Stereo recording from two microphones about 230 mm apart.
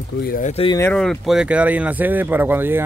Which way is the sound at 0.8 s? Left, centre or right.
Centre.